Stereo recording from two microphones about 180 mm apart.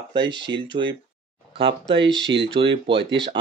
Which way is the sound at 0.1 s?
25° right (ahead or behind).